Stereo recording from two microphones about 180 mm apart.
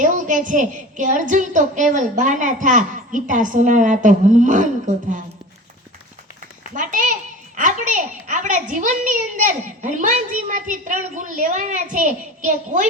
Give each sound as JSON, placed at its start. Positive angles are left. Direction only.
{"t": 0.0, "sound": "a child's voice", "side_deg": -45}
{"t": 6.7, "sound": "a child's voice", "side_deg": -45}